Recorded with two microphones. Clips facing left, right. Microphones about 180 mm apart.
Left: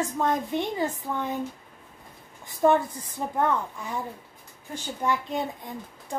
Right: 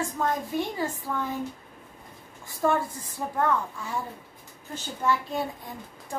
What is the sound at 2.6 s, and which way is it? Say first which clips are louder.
A woman's voice: left 4 dB; 20° left (ahead or behind).